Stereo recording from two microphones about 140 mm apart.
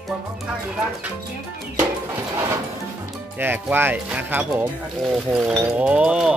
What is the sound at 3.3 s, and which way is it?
Speech, 15° right (ahead or behind).